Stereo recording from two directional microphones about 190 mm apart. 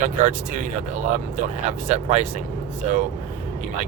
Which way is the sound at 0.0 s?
45° right (ahead or behind).